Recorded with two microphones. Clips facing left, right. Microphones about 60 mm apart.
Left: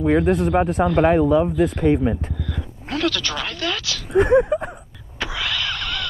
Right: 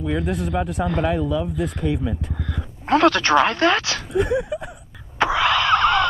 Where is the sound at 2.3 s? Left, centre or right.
Right.